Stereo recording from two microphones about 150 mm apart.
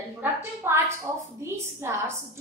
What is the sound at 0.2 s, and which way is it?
A woman's voice, 15° right (ahead or behind).